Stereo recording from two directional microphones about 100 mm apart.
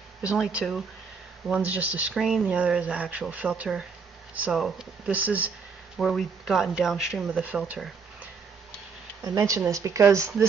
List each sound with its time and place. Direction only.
0.2 s speech: 10° right (ahead or behind)
2.1 s speech: 5° right (ahead or behind)
2.5 s speech: 15° right (ahead or behind)
5.1 s speech: 15° right (ahead or behind)
6.1 s speech: 5° right (ahead or behind)
9.2 s speech: 35° right (ahead or behind)